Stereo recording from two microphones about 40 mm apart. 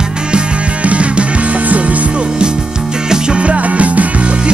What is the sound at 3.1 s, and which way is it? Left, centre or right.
Music, right.